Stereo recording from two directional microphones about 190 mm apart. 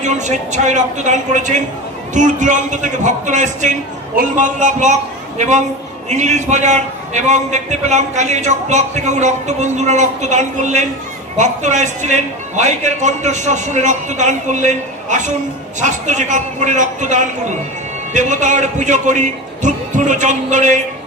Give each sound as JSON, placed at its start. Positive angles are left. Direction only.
{"t": 0.0, "sound": "a man's voice", "side_deg": -40}